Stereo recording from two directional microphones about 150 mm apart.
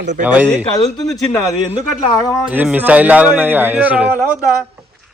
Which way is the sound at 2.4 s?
10° right (ahead or behind).